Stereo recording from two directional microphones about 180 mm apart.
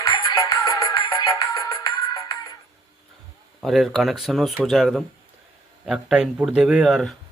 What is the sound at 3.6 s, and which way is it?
Speech, centre (ahead or behind).